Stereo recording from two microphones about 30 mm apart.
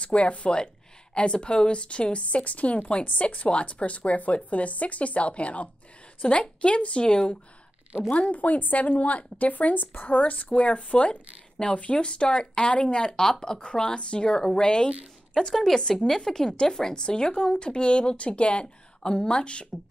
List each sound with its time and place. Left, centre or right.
0.0 s a woman's voice: left
6.2 s speech: left
6.6 s speech: left
7.1 s speech: left
8.1 s speech: left
10.6 s a woman's voice: left; by 13.6 s centre
13.9 s speech: left
14.3 s speech: left
15.5 s a woman's voice: centre
16.9 s speech: left